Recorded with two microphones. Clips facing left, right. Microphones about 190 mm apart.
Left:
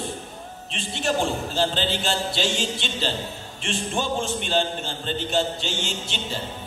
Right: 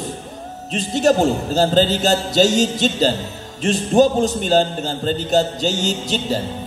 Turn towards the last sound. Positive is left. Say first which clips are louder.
# right 9 dB
turn(degrees=-40)  # may be behind; listen again after turning